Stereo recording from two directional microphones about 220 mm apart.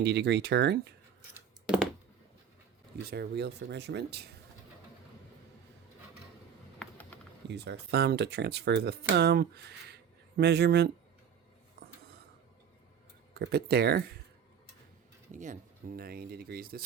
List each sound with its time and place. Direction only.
0.0 s speech: 50° right (ahead or behind)
1.6 s a sound: 5° right (ahead or behind)
3.0 s speech: 50° right (ahead or behind)
6.8 s a sound: 5° left (ahead or behind)
7.4 s speech: 50° right (ahead or behind)
13.3 s speech: 50° right (ahead or behind)
15.3 s speech: 35° right (ahead or behind)